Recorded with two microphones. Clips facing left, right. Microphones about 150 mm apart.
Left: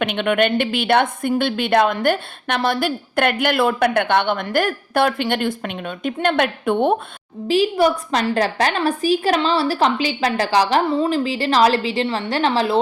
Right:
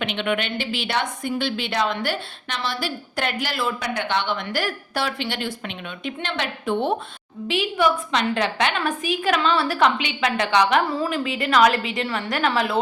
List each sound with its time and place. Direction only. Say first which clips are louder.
0.0 s a woman's voice: left 7 dB; 50° left (ahead or behind)
7.4 s a woman's voice: left 5 dB; 35° left (ahead or behind)